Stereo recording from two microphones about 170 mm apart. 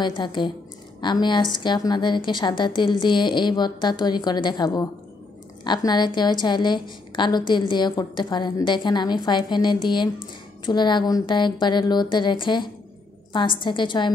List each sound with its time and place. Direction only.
0.0 s a woman's voice: 25° left (ahead or behind)